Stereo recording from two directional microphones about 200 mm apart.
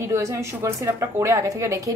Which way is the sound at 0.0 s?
15° right (ahead or behind).